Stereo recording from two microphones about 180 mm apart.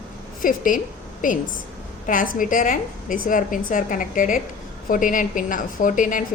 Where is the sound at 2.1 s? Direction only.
50° left (ahead or behind).